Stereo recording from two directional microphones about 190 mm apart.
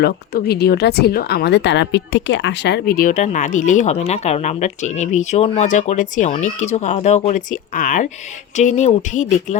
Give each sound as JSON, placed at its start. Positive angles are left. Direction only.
{"t": 0.0, "sound": "speech", "side_deg": 55}